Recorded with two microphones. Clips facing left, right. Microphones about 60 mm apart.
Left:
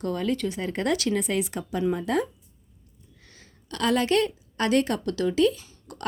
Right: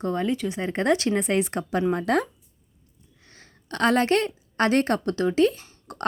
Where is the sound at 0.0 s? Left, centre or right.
Right.